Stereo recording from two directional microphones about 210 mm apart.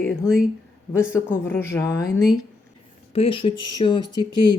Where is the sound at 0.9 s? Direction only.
10° left (ahead or behind).